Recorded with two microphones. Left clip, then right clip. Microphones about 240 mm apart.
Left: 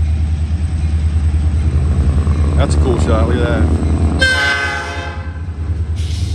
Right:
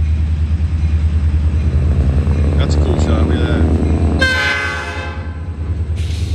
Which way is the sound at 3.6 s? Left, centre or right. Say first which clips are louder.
Right 1 dB; left.